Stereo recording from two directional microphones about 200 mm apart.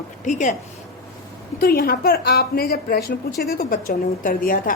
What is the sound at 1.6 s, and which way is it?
A woman's voice, 45° left (ahead or behind).